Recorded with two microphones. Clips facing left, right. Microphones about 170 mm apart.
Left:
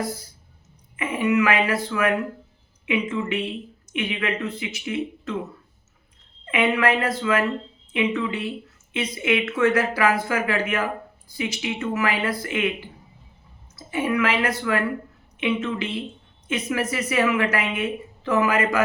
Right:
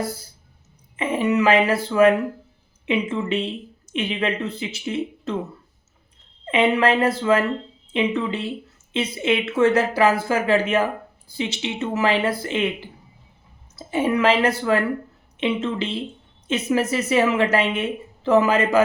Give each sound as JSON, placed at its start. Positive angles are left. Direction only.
{"t": 0.9, "sound": "a woman's voice", "side_deg": -30}
{"t": 6.4, "sound": "a woman's voice", "side_deg": -30}